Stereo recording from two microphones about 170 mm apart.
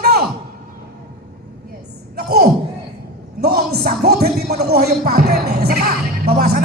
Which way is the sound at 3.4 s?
65° right (ahead or behind).